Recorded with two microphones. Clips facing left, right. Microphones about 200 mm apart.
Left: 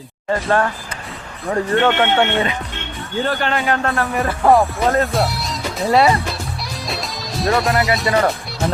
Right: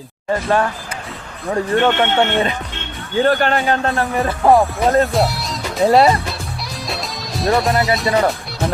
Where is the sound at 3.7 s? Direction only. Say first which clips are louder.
Right 1 dB; 25° right (ahead or behind).